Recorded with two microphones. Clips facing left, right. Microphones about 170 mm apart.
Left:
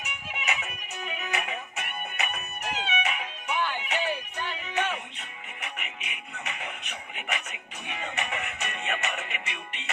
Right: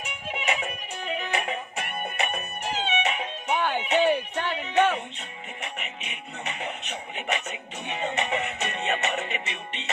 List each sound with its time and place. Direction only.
0.0 s music: 30° right (ahead or behind)
3.8 s a sound: 25° right (ahead or behind)
4.1 s music: 65° right (ahead or behind)
5.6 s music: 30° right (ahead or behind)